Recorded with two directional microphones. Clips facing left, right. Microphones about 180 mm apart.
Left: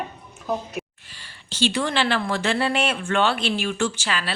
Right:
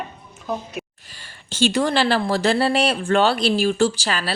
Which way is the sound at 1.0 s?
45° right (ahead or behind).